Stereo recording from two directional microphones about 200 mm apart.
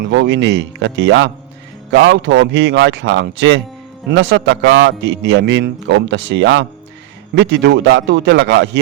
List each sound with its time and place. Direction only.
0.1 s a man's voice: 60° right (ahead or behind)